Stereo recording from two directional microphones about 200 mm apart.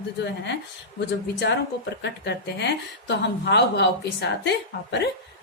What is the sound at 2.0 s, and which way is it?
A woman's voice, 60° left (ahead or behind).